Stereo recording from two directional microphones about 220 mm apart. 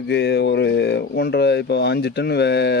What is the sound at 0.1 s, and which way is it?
Speech, 50° left (ahead or behind).